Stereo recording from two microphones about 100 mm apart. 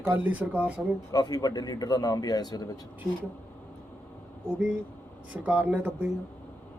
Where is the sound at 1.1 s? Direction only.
40° left (ahead or behind).